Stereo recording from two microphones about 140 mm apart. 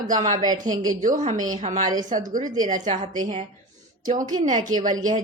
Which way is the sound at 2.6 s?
65° right (ahead or behind).